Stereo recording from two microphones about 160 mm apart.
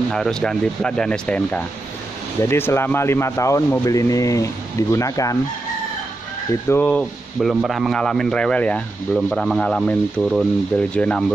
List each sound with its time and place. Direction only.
0.1 s a man's voice: 5° left (ahead or behind); by 5.4 s 20° left (ahead or behind)
6.7 s a man's voice: 10° left (ahead or behind)